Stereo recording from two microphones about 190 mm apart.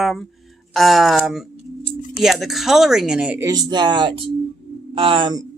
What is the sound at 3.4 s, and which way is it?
Speech, 20° right (ahead or behind).